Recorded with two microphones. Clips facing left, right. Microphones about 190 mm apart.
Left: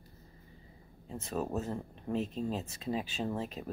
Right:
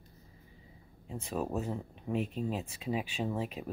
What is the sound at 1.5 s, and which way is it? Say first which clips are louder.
Speech: even; 5° right (ahead or behind).